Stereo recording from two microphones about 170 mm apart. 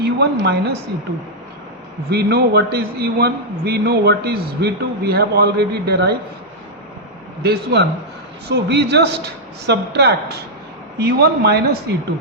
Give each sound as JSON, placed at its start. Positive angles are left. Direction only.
{"t": 0.0, "sound": "a woman's voice", "side_deg": -75}
{"t": 2.0, "sound": "a man's voice", "side_deg": -70}
{"t": 7.4, "sound": "a man's voice", "side_deg": -75}